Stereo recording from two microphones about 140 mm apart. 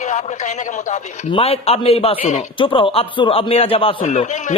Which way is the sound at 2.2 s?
60° left (ahead or behind).